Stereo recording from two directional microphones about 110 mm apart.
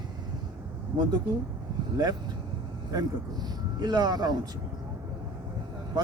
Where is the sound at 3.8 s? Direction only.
40° right (ahead or behind).